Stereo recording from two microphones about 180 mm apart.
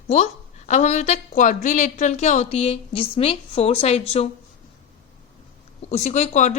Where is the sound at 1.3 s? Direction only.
45° left (ahead or behind).